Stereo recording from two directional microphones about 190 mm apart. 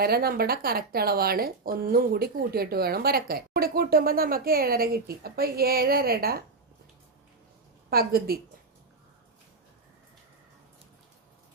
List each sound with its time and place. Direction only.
0.0 s speech: 55° right (ahead or behind)
7.9 s speech: 50° right (ahead or behind)